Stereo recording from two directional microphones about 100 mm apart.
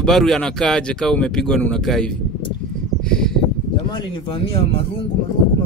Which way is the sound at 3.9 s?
60° left (ahead or behind).